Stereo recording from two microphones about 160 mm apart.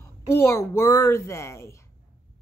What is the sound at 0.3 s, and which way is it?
A woman's voice, 15° left (ahead or behind).